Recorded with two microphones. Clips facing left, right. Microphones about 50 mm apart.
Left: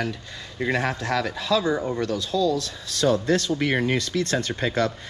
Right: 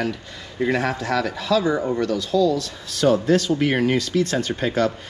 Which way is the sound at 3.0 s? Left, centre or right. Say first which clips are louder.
Right 3 dB; right.